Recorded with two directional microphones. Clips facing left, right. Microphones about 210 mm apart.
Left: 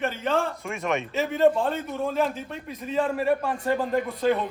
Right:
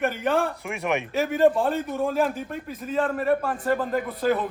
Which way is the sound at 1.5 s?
5° right (ahead or behind).